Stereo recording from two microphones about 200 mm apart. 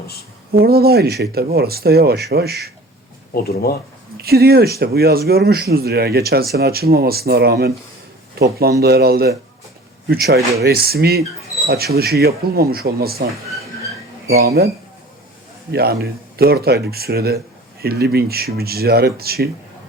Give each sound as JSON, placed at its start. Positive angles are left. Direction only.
{"t": 0.5, "sound": "speech", "side_deg": -50}
{"t": 3.3, "sound": "speech", "side_deg": 50}
{"t": 4.2, "sound": "speech", "side_deg": -50}
{"t": 14.3, "sound": "speech", "side_deg": -50}
{"t": 15.7, "sound": "speech", "side_deg": -50}